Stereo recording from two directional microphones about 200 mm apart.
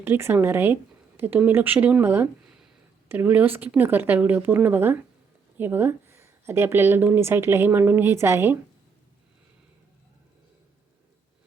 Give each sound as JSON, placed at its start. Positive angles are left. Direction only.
{"t": 0.0, "sound": "a woman's voice", "side_deg": -10}